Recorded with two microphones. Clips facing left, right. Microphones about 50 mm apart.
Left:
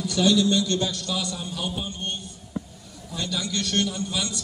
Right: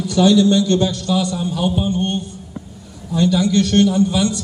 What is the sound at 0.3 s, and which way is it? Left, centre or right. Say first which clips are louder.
A man's voice: right 7 dB; right.